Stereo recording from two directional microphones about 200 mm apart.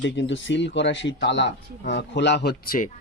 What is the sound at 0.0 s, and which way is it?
A man's voice, 65° left (ahead or behind).